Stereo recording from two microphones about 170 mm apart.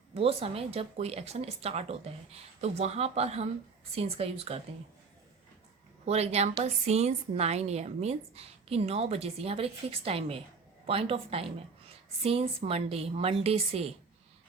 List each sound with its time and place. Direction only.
0.1 s a woman's voice: 35° right (ahead or behind)
6.1 s a woman's voice: 40° right (ahead or behind)